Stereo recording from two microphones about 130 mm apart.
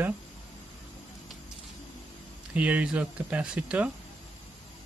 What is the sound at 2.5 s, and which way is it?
Speech, 10° right (ahead or behind).